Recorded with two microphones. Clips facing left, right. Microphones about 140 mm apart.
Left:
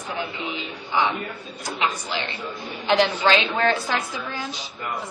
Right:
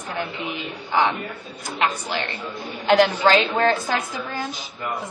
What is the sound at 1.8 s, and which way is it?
A woman's voice, 55° right (ahead or behind).